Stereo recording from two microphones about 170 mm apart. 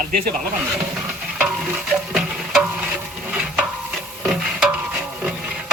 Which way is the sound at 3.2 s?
5° right (ahead or behind).